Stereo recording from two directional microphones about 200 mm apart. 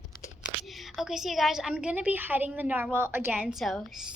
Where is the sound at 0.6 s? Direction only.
Centre (ahead or behind).